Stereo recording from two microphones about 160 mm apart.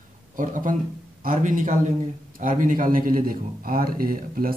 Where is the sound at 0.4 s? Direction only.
55° right (ahead or behind).